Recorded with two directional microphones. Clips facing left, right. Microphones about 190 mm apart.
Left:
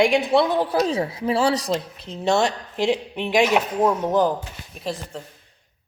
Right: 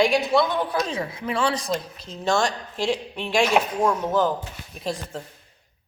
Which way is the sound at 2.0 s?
20° left (ahead or behind).